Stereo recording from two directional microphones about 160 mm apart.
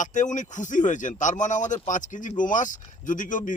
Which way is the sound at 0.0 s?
50° left (ahead or behind).